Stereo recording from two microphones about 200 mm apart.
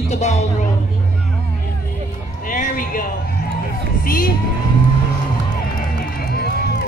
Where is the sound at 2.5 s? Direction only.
45° left (ahead or behind).